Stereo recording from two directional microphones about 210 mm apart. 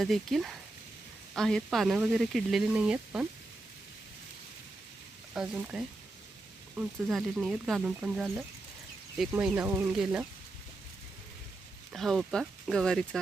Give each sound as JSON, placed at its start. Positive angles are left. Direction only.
{"t": 0.0, "sound": "speech", "side_deg": 0}
{"t": 5.3, "sound": "speech", "side_deg": -5}
{"t": 11.9, "sound": "speech", "side_deg": 0}